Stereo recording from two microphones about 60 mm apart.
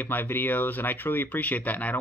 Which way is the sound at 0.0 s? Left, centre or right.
Left.